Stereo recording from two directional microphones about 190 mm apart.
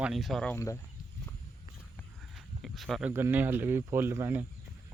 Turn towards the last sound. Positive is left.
turn(degrees=-15)  # may be behind; listen again after turning